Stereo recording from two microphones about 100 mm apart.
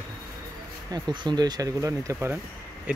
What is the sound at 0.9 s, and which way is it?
Speech, 45° right (ahead or behind).